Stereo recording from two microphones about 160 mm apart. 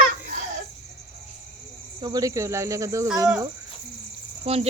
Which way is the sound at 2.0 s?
20° right (ahead or behind).